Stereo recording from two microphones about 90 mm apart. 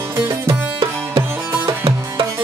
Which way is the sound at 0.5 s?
90° right.